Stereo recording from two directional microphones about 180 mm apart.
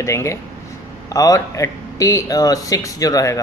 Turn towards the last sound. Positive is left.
turn(degrees=20)  # may be behind; listen again after turning